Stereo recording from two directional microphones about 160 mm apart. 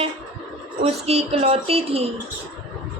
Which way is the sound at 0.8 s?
40° right (ahead or behind).